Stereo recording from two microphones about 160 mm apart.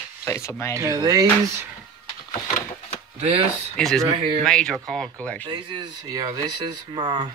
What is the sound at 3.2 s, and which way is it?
Speech, 40° right (ahead or behind).